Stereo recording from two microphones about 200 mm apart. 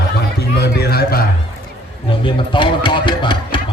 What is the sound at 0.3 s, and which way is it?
Music, 55° left (ahead or behind).